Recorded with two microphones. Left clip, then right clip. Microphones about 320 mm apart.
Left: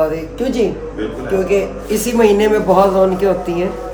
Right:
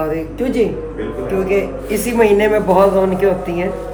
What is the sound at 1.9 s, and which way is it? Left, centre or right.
A woman's voice, centre.